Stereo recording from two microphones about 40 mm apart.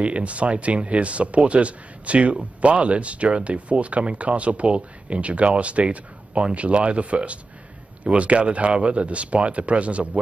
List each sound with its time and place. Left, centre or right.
0.0 s speech: right